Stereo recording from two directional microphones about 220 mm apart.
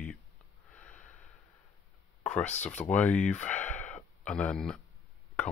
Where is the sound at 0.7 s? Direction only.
5° left (ahead or behind).